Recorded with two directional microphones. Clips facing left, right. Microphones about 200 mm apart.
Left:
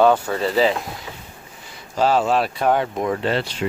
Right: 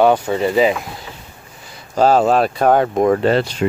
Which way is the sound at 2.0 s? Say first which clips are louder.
Right 5 dB; 40° right (ahead or behind).